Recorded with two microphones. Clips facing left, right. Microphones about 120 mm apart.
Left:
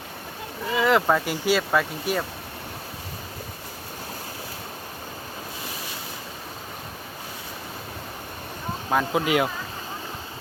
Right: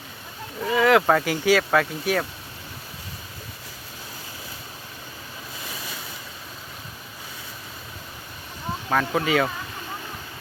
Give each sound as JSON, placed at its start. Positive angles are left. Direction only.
{"t": 0.6, "sound": "speech", "side_deg": 0}
{"t": 8.9, "sound": "speech", "side_deg": 15}